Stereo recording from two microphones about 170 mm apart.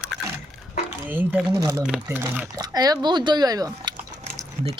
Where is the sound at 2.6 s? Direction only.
25° right (ahead or behind).